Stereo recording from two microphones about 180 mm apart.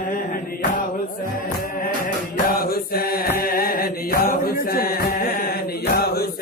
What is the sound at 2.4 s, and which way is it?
Mantra, 55° left (ahead or behind).